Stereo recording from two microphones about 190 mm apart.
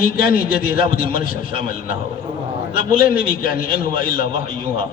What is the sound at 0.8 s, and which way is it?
Speech, 30° right (ahead or behind).